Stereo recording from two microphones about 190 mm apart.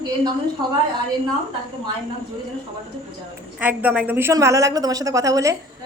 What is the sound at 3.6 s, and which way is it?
A woman's voice, 10° right (ahead or behind).